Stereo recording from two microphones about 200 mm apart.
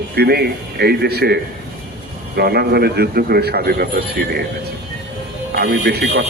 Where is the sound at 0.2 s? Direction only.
50° right (ahead or behind).